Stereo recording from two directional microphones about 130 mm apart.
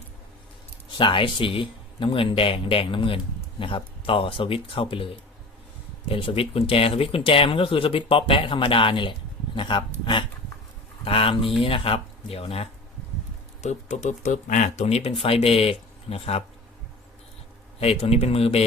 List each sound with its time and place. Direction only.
0.9 s speech: 40° left (ahead or behind)
13.6 s speech: 65° left (ahead or behind)
17.7 s speech: 50° left (ahead or behind)